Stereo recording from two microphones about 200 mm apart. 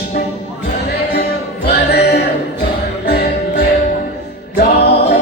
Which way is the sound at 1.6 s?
55° left (ahead or behind).